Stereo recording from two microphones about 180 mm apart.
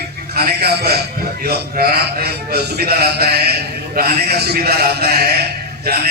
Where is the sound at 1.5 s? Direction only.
60° right (ahead or behind).